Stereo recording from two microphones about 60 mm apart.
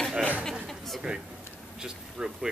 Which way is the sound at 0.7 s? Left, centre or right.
Centre.